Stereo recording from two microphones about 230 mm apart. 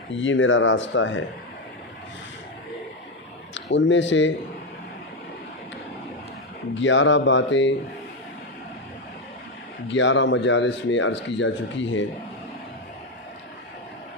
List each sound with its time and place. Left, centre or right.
0.2 s speech: left
3.5 s speech: left
6.7 s speech: left
9.9 s speech: left